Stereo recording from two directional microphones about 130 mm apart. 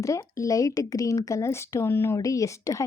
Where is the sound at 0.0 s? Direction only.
25° left (ahead or behind).